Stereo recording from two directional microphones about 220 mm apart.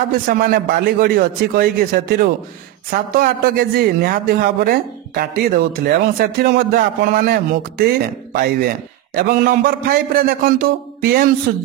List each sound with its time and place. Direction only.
0.3 s a man's voice: 40° right (ahead or behind)